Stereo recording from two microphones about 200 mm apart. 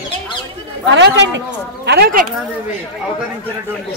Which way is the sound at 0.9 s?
60° right (ahead or behind).